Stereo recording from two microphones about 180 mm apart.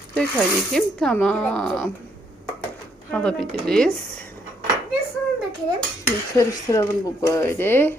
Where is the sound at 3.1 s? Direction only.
5° left (ahead or behind).